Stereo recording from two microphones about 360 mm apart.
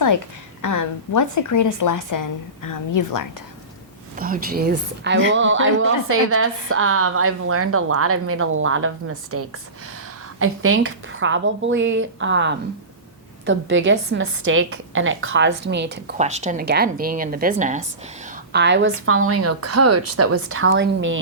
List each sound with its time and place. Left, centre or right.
0.6 s a woman's voice: left
4.1 s a woman's voice: right
16.1 s a woman's voice: centre